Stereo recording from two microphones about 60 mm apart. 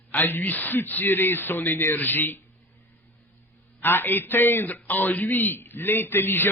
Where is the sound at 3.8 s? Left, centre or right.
Left.